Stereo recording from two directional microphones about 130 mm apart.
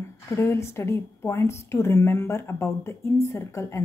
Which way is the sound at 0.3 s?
20° left (ahead or behind).